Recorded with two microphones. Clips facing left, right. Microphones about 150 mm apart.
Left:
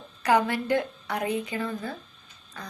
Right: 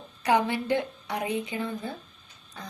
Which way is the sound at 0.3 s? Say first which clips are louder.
Left 1 dB; 15° right (ahead or behind).